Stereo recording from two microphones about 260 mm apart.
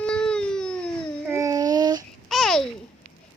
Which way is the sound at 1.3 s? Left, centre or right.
Centre.